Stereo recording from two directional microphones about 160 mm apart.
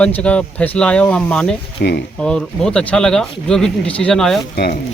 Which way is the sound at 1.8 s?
75° left (ahead or behind).